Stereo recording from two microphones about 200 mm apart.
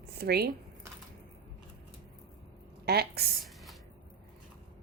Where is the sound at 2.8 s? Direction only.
50° right (ahead or behind).